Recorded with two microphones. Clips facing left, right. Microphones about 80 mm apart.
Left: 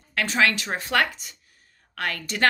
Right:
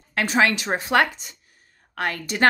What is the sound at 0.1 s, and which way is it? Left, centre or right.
A woman's voice, right.